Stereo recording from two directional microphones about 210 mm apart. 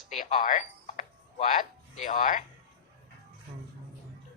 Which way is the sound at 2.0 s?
40° left (ahead or behind).